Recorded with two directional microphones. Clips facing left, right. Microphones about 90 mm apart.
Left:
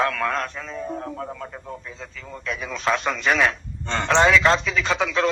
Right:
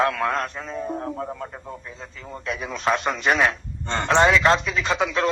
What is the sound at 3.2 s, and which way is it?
A man's voice, 25° right (ahead or behind).